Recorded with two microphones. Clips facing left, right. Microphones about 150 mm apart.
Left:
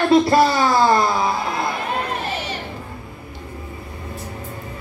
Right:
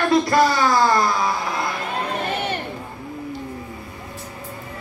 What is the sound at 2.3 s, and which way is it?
Crowd, 55° right (ahead or behind).